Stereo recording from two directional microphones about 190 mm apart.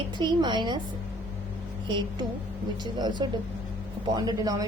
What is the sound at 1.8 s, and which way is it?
A woman's voice, 25° right (ahead or behind).